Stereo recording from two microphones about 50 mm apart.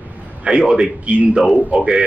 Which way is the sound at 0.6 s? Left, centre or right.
Centre.